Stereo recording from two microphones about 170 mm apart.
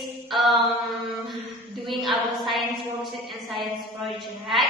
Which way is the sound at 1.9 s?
Centre (ahead or behind).